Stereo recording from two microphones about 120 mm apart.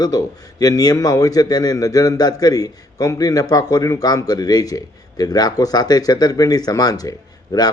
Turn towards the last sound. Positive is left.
turn(degrees=30)  # may be behind; listen again after turning